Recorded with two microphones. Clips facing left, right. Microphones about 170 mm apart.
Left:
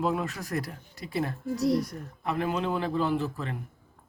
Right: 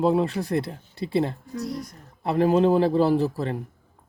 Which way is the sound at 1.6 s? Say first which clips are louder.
Left 6 dB; 75° left (ahead or behind).